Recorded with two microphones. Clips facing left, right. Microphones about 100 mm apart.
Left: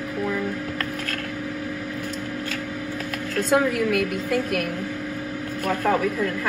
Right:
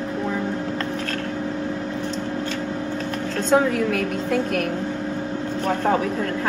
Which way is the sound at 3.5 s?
40° right (ahead or behind).